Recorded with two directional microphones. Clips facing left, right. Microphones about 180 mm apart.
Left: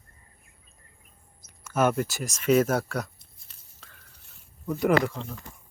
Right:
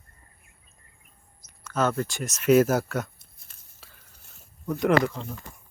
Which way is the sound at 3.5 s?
50° right (ahead or behind).